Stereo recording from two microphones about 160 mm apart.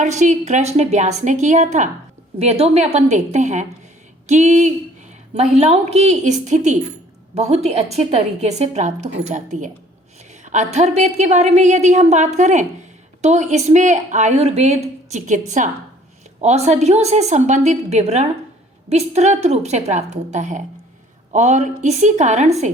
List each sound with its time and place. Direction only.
0.0 s a woman's voice: 50° right (ahead or behind)